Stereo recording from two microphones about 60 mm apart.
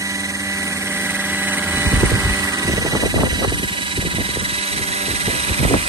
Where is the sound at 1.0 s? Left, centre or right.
Right.